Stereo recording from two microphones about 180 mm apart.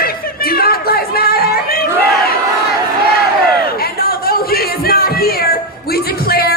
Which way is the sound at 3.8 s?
55° left (ahead or behind).